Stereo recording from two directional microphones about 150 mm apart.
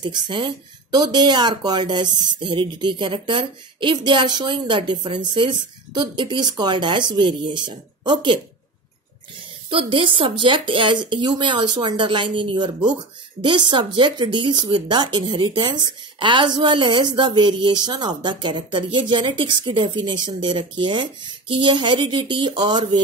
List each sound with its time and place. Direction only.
0.0 s speech: 30° right (ahead or behind)
9.7 s speech: 35° right (ahead or behind)